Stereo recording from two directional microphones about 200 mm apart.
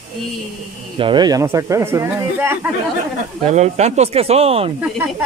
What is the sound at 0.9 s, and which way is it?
Speech, 25° right (ahead or behind).